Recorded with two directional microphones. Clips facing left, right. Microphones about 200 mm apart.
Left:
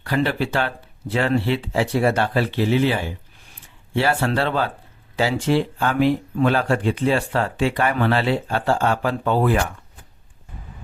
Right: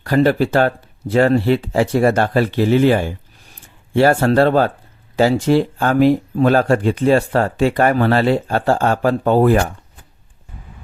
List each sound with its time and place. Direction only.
0.0 s speech: 45° right (ahead or behind)